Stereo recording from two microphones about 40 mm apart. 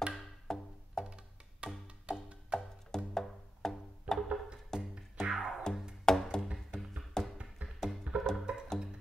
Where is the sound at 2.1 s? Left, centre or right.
Right.